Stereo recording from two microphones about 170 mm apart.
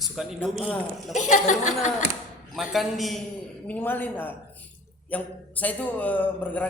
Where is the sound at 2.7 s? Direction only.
Centre (ahead or behind).